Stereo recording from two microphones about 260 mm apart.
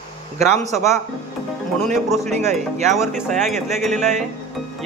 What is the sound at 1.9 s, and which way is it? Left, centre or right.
Speech, centre.